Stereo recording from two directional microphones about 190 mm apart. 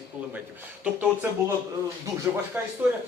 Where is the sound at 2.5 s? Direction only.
10° right (ahead or behind).